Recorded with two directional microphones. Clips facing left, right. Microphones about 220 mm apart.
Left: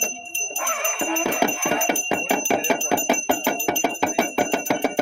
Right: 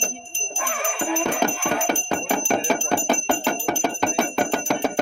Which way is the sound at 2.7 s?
5° left (ahead or behind).